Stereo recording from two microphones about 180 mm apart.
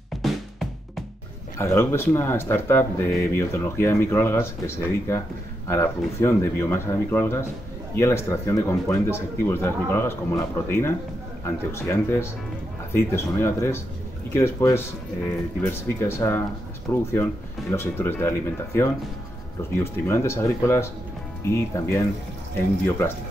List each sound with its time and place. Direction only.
0.2 s music: centre (ahead or behind)
1.6 s speech: 15° left (ahead or behind)